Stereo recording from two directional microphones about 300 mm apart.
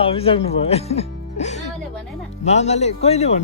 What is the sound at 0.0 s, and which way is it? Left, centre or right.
Speech, centre.